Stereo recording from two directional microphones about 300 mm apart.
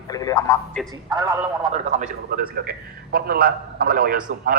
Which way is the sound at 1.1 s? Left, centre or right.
Centre.